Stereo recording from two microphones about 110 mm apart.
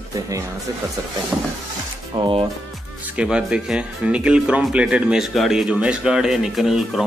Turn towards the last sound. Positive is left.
turn(degrees=-5)  # may be behind; listen again after turning